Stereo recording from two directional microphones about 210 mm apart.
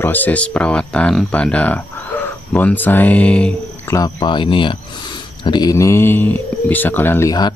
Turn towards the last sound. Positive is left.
turn(degrees=20)  # may be behind; listen again after turning